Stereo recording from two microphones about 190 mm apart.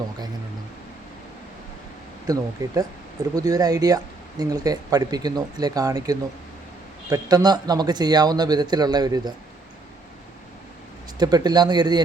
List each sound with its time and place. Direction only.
2.2 s speech: 20° right (ahead or behind)
11.2 s speech: 20° right (ahead or behind)